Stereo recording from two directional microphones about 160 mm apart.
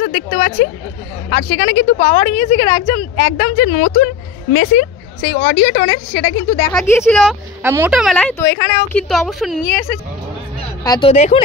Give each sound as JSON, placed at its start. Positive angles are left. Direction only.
{"t": 0.0, "sound": "a sound", "side_deg": 60}
{"t": 1.3, "sound": "speech", "side_deg": 65}
{"t": 1.9, "sound": "a woman's voice", "side_deg": 45}
{"t": 4.5, "sound": "speech", "side_deg": 90}
{"t": 7.0, "sound": "speech", "side_deg": 0}
{"t": 7.6, "sound": "speech", "side_deg": -15}
{"t": 7.9, "sound": "speech", "side_deg": -5}
{"t": 8.2, "sound": "a woman's voice", "side_deg": 10}
{"t": 10.8, "sound": "speech", "side_deg": 25}
{"t": 11.1, "sound": "speech", "side_deg": 40}